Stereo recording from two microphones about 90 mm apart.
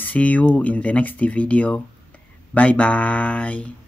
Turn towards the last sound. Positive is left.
turn(degrees=15)  # may be behind; listen again after turning